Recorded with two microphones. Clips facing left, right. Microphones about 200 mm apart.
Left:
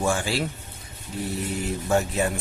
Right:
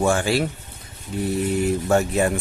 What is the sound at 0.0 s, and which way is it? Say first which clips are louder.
Speech: right 5 dB; 55° right (ahead or behind).